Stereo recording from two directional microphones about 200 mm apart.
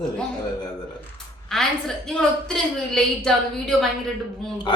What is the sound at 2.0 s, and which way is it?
Speech, 5° left (ahead or behind).